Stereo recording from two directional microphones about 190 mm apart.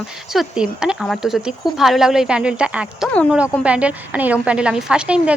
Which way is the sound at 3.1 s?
5° left (ahead or behind).